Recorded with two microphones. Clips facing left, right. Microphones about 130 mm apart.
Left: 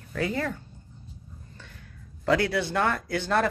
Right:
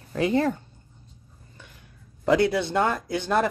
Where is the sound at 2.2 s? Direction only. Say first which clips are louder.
Right 3 dB; 20° right (ahead or behind).